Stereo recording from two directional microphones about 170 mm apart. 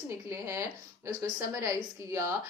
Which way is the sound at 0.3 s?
15° right (ahead or behind).